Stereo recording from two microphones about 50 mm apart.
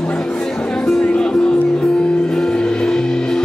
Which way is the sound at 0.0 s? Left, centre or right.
Centre.